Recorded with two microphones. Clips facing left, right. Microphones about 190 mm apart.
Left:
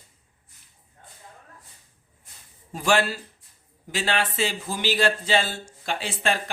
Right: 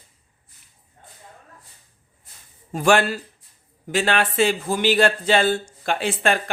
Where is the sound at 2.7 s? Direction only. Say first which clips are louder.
Right 4 dB; 55° right (ahead or behind).